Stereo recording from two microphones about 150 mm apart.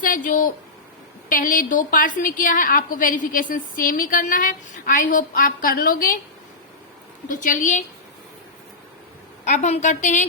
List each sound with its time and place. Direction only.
0.0 s a woman's voice: 65° left (ahead or behind)
7.3 s a woman's voice: 60° left (ahead or behind)
9.4 s a woman's voice: 50° left (ahead or behind)